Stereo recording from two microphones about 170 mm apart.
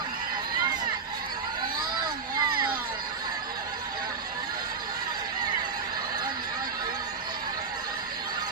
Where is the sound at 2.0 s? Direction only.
25° right (ahead or behind).